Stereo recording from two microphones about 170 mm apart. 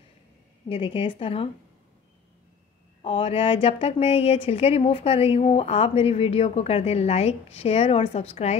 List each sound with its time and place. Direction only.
0.7 s speech: 30° left (ahead or behind)
3.0 s speech: 35° left (ahead or behind)